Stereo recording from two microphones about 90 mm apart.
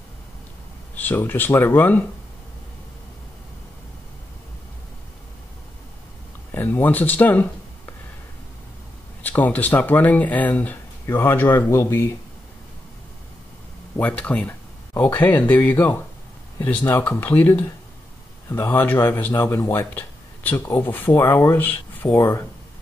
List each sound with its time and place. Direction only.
0.9 s speech: 20° left (ahead or behind)
6.5 s speech: 20° left (ahead or behind)
9.2 s speech: 20° left (ahead or behind)
13.9 s speech: 15° left (ahead or behind)